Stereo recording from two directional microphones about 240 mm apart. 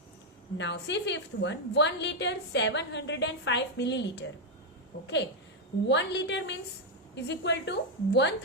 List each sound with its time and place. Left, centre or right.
0.5 s a woman's voice: left
5.9 s a woman's voice: left